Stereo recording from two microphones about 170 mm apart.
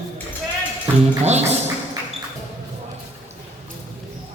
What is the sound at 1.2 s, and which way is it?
Speech, 40° right (ahead or behind).